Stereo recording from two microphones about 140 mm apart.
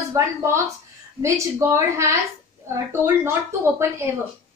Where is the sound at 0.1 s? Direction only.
20° right (ahead or behind).